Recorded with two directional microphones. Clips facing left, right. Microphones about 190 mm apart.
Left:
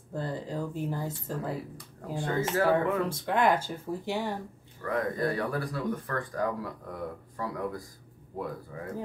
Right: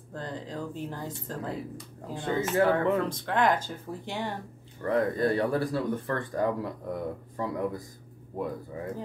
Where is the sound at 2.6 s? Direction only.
10° left (ahead or behind).